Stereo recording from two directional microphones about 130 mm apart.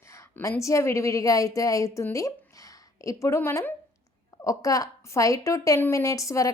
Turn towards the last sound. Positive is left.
turn(degrees=25)  # may be behind; listen again after turning